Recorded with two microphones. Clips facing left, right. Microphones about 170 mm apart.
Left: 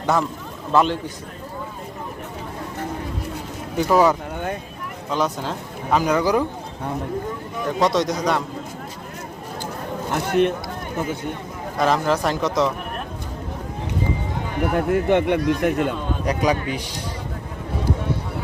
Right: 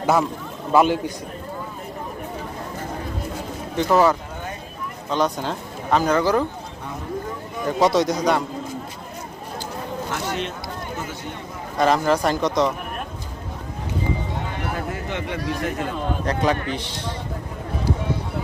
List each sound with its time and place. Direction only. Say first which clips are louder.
0.0 s speech: right 2 dB; 5° right (ahead or behind)
3.8 s speech: left 1 dB; 5° left (ahead or behind)
5.1 s speech: right 1 dB; 5° left (ahead or behind)
7.6 s speech: right 1 dB; centre (ahead or behind)
10.1 s speech: left 10 dB; 55° left (ahead or behind)
11.8 s speech: right 1 dB; centre (ahead or behind)
14.6 s speech: left 8 dB; 55° left (ahead or behind)
16.2 s a man's voice: left 2 dB; 10° left (ahead or behind)